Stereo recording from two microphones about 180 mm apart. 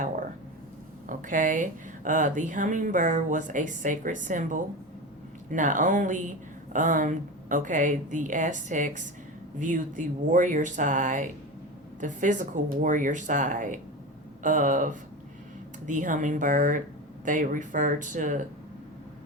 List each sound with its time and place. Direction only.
1.0 s speech: 45° right (ahead or behind)